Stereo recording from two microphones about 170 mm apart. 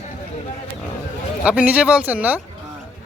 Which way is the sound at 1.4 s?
10° right (ahead or behind).